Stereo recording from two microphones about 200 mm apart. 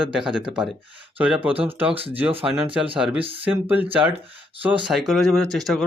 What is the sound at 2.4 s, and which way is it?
Speech, 5° right (ahead or behind).